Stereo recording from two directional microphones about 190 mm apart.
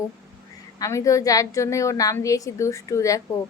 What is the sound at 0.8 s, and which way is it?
Speech, 15° left (ahead or behind).